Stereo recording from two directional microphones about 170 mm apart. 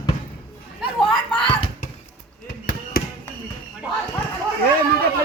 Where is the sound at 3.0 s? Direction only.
60° left (ahead or behind).